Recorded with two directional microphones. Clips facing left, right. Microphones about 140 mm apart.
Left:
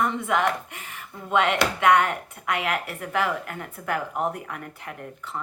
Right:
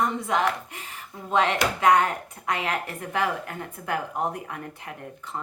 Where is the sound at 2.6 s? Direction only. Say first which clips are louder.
Left 1 dB; 20° right (ahead or behind).